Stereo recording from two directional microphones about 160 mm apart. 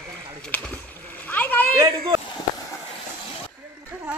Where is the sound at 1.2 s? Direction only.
10° left (ahead or behind).